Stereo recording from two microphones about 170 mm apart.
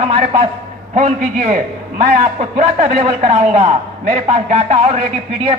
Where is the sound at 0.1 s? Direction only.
35° right (ahead or behind).